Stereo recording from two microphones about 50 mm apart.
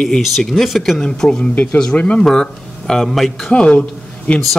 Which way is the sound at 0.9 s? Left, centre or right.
Centre.